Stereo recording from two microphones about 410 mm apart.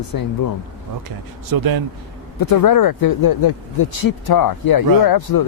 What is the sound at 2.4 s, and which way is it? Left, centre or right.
Speech, left.